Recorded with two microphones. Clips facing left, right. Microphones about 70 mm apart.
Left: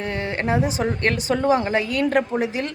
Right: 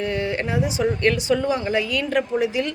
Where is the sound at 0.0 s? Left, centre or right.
Left.